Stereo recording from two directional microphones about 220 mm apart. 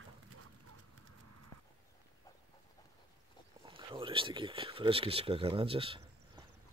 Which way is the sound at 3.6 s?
25° right (ahead or behind).